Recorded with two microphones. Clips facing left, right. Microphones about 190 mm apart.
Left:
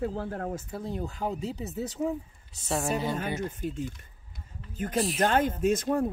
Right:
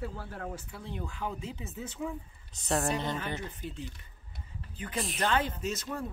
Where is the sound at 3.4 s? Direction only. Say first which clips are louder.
Left 8 dB; 45° left (ahead or behind).